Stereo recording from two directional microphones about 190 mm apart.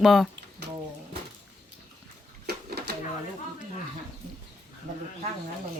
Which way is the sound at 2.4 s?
60° right (ahead or behind).